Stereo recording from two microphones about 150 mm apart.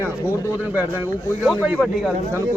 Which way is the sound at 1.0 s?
10° right (ahead or behind).